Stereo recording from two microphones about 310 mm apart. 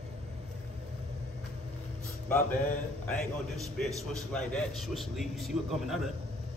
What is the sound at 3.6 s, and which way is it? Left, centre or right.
A man's voice, centre.